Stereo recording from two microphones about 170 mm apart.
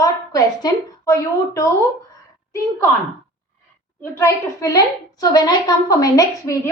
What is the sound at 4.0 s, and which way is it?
A woman's voice, 20° left (ahead or behind).